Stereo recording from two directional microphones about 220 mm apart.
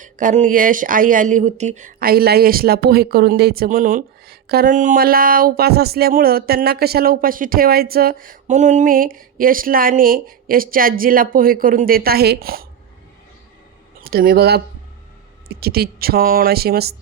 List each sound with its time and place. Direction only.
0.0 s speech: 35° right (ahead or behind)
14.0 s speech: 40° right (ahead or behind)